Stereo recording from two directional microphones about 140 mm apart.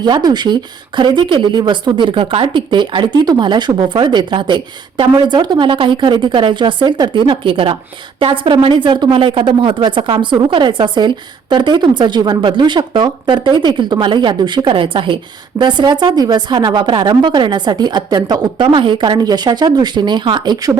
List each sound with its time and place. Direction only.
0.0 s a woman's voice: 30° right (ahead or behind)